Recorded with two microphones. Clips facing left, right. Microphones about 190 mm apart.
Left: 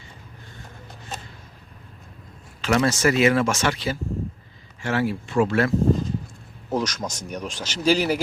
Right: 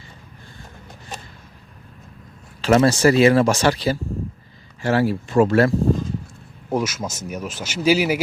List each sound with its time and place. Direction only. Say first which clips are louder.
2.6 s speech: right 5 dB; 35° right (ahead or behind)
6.7 s speech: right 2 dB; 10° right (ahead or behind)